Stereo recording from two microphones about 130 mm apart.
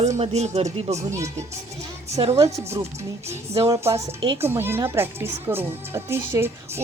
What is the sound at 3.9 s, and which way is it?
Speech, 40° right (ahead or behind).